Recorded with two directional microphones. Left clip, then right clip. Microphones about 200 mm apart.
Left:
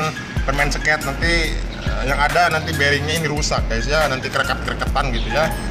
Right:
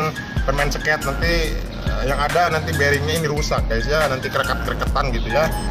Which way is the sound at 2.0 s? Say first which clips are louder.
Left 2 dB; centre (ahead or behind).